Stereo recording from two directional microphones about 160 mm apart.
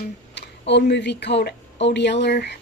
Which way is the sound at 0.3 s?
90° left.